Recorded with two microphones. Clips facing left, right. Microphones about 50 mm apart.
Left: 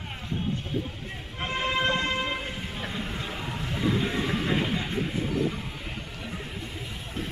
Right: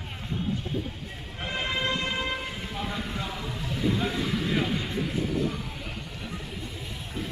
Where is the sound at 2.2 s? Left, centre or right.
Left.